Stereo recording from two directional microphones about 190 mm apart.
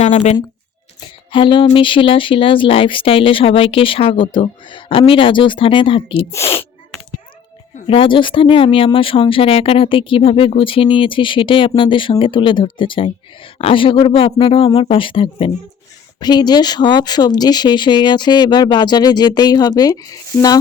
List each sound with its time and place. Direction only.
0.0 s speech: 40° left (ahead or behind)
1.3 s speech: 25° left (ahead or behind)
7.9 s speech: 25° left (ahead or behind)